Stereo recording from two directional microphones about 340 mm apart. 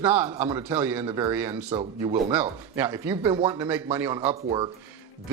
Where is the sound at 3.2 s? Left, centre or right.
Centre.